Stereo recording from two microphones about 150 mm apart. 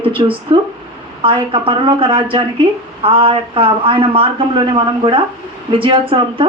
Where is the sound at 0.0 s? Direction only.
35° right (ahead or behind).